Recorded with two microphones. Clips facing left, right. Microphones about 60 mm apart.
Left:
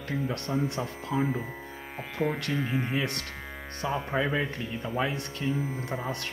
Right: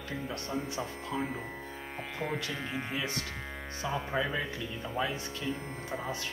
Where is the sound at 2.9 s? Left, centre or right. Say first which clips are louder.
Left 4 dB; left.